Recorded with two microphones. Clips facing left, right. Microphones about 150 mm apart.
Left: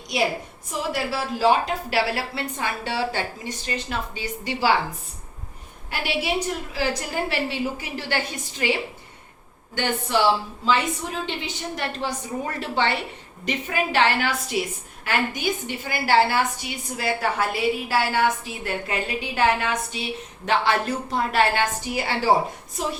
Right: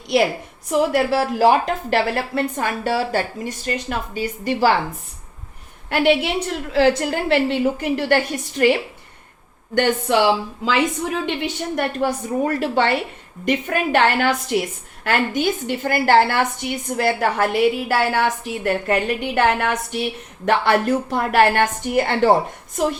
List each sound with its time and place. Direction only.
0.7 s a woman's voice: 60° right (ahead or behind); by 4.7 s 45° right (ahead or behind)
5.9 s a woman's voice: 60° right (ahead or behind)
9.7 s a woman's voice: 70° right (ahead or behind)
18.7 s a woman's voice: 55° right (ahead or behind)